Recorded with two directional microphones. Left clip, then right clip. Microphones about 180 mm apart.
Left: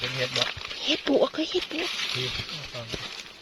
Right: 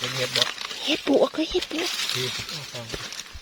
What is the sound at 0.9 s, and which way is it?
Speech, 15° right (ahead or behind).